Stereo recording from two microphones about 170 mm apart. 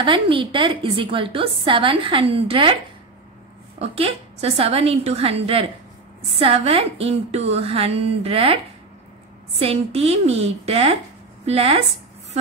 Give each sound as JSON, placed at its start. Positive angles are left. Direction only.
{"t": 0.0, "sound": "a woman's voice", "side_deg": -30}
{"t": 3.8, "sound": "a woman's voice", "side_deg": -35}
{"t": 9.6, "sound": "a woman's voice", "side_deg": -35}